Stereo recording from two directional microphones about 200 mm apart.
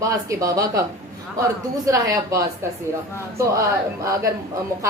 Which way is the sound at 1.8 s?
15° right (ahead or behind).